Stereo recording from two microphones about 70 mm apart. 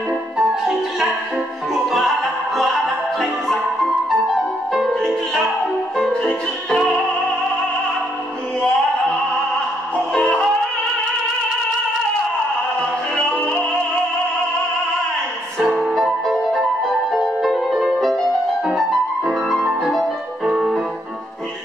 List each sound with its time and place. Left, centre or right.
0.4 s music: centre
13.1 s music: centre
15.7 s music: centre
20.4 s keyboard: centre